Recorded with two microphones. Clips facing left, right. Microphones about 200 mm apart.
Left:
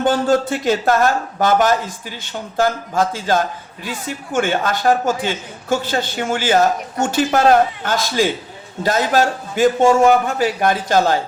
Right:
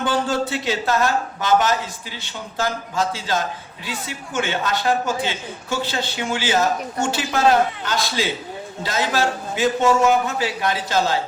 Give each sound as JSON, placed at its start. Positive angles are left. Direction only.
{"t": 0.0, "sound": "a man's voice", "side_deg": 45}